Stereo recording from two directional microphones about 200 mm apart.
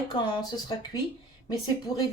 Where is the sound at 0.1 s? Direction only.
20° left (ahead or behind).